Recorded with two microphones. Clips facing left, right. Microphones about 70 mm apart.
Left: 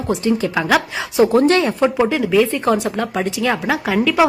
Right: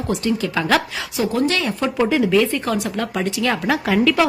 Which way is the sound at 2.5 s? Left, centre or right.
Left.